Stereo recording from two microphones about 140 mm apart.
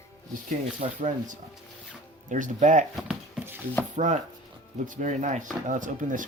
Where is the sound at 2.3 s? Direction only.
65° right (ahead or behind).